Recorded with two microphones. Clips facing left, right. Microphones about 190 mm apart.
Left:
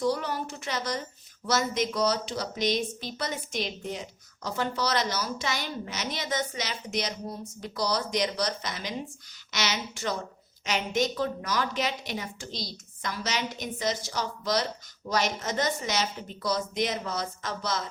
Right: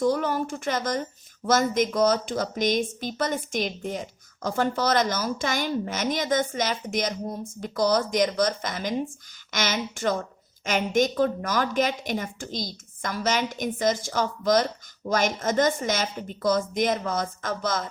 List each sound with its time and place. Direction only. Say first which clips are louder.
0.0 s a woman's voice: right 5 dB; 50° right (ahead or behind)